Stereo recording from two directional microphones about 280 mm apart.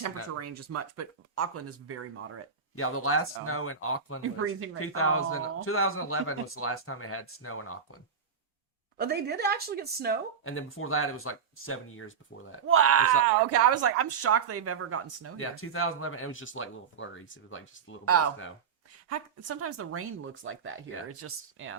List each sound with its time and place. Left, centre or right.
0.7 s speech: right
2.7 s speech: left
4.2 s speech: right
4.8 s speech: left
9.0 s a woman's voice: right
10.4 s speech: left
12.6 s speech: right
15.4 s speech: left
18.0 s speech: right